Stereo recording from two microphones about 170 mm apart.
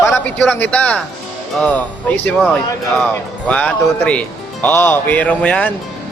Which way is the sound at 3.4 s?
5° left (ahead or behind).